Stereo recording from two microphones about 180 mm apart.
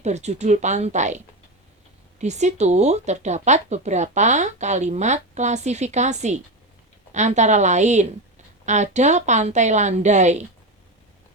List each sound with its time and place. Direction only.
0.0 s speech: 40° right (ahead or behind)